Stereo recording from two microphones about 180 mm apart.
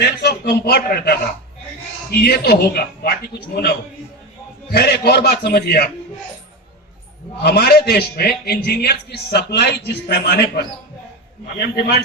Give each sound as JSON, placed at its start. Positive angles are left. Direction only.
{"t": 0.0, "sound": "a man's voice", "side_deg": 65}
{"t": 7.4, "sound": "a man's voice", "side_deg": 65}